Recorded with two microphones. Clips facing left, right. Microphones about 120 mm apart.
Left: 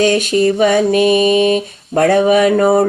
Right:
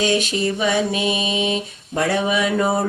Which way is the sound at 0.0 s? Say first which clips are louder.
Left 7 dB; 50° left (ahead or behind).